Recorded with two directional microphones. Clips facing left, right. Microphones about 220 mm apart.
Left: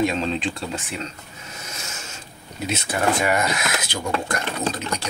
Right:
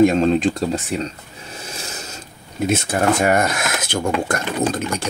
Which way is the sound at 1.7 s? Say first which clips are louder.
Right 5 dB; 35° right (ahead or behind).